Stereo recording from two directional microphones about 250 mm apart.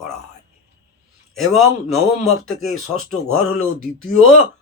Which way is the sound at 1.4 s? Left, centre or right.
Centre.